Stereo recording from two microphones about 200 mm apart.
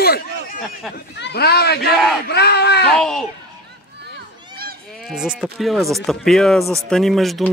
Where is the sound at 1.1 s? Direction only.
55° left (ahead or behind).